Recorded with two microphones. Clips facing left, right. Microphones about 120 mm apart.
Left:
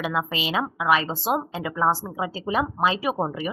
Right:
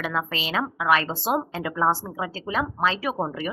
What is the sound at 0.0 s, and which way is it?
Speech, 10° left (ahead or behind).